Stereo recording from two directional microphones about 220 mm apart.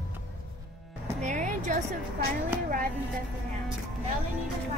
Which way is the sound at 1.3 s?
35° right (ahead or behind).